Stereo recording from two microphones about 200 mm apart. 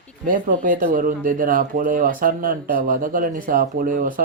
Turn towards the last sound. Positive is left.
turn(degrees=-40)  # may be behind; listen again after turning